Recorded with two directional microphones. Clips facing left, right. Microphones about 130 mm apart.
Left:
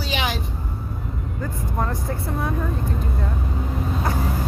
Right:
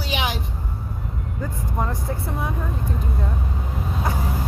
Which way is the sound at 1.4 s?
10° right (ahead or behind).